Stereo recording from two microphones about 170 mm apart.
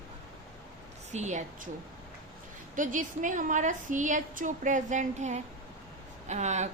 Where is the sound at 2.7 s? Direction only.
50° right (ahead or behind).